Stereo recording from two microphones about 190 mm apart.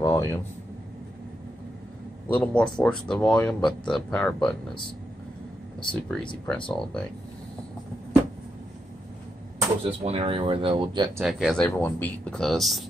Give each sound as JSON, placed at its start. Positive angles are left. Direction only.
{"t": 0.0, "sound": "a man's voice", "side_deg": 15}
{"t": 2.2, "sound": "a man's voice", "side_deg": 5}
{"t": 5.8, "sound": "speech", "side_deg": 5}
{"t": 9.8, "sound": "speech", "side_deg": -30}
{"t": 11.1, "sound": "speech", "side_deg": 0}